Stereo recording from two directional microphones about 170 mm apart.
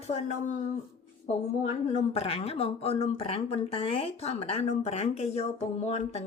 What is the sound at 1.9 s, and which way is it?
Speech, 35° left (ahead or behind).